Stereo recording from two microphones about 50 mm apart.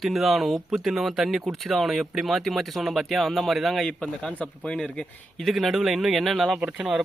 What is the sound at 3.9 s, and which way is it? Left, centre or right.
Speech, centre.